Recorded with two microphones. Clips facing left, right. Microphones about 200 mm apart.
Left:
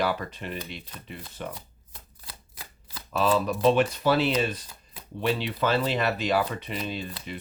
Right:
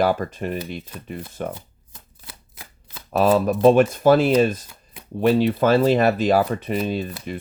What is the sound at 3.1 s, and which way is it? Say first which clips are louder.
Speech: right 7 dB; 55° right (ahead or behind).